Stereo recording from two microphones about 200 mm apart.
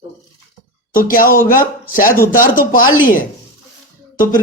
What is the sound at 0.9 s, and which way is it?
Speech, 45° left (ahead or behind).